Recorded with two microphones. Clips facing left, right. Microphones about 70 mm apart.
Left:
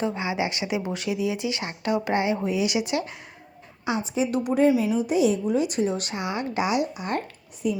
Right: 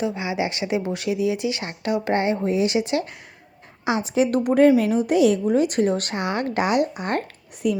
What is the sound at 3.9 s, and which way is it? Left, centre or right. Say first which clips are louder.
A woman's voice: right 5 dB; right.